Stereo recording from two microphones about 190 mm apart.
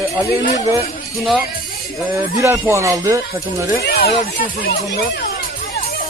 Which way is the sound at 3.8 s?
55° left (ahead or behind).